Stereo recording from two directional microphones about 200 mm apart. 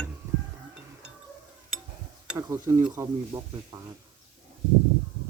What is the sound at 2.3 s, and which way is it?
Speech, 15° right (ahead or behind).